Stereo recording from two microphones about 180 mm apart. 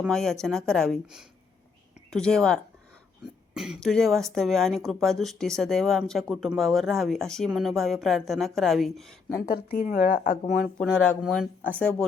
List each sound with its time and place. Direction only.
0.0 s speech: centre (ahead or behind)
9.5 s speech: 55° left (ahead or behind)
10.8 s speech: 5° left (ahead or behind)